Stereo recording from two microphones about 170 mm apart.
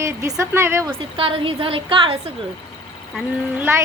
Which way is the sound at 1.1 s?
30° right (ahead or behind).